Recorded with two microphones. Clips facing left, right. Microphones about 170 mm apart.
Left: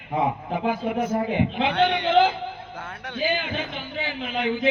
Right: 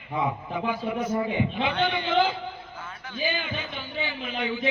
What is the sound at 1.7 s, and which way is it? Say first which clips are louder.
Speech: left 7 dB; 75° left (ahead or behind).